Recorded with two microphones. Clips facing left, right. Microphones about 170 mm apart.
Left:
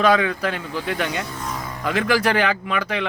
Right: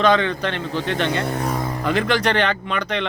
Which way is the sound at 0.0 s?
5° left (ahead or behind).